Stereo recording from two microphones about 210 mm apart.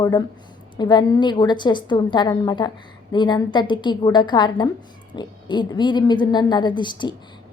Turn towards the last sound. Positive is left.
turn(degrees=20)  # may be behind; listen again after turning